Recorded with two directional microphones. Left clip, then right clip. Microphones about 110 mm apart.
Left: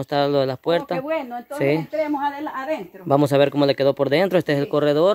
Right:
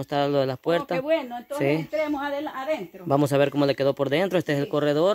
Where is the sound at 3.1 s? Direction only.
25° left (ahead or behind).